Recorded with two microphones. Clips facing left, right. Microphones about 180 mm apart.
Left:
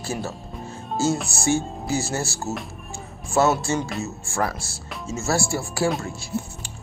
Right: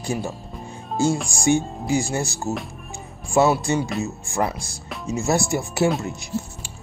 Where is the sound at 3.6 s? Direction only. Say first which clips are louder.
Right 3 dB; 15° right (ahead or behind).